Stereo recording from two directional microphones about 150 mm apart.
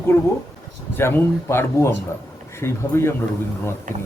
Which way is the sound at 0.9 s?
15° left (ahead or behind).